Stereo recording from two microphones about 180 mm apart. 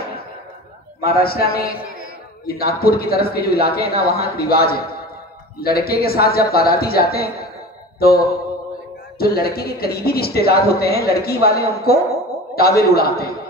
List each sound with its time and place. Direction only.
1.0 s a man's voice: 55° left (ahead or behind)